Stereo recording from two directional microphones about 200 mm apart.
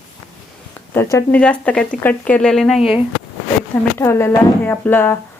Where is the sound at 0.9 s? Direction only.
15° left (ahead or behind); by 3.0 s centre (ahead or behind).